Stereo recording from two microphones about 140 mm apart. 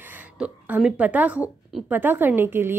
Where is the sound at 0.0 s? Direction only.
10° right (ahead or behind).